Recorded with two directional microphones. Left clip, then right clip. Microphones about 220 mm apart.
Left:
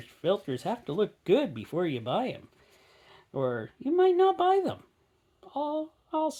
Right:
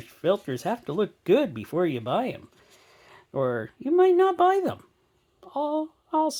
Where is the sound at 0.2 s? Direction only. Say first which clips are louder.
Right 4 dB; 30° right (ahead or behind).